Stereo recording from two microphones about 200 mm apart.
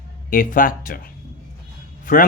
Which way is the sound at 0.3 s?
45° left (ahead or behind).